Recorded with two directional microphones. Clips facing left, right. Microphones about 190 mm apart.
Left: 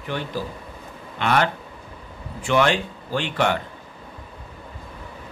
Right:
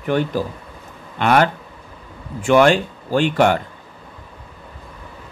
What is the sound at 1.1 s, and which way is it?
Speech, 50° right (ahead or behind).